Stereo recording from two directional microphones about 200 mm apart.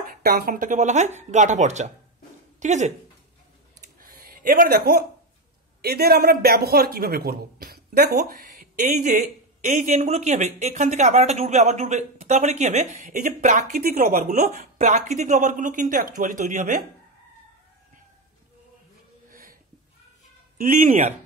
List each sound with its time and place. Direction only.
0.1 s speech: 50° right (ahead or behind)
4.0 s a sound: 45° right (ahead or behind)
5.8 s a man's voice: 50° right (ahead or behind)
20.5 s speech: 40° right (ahead or behind)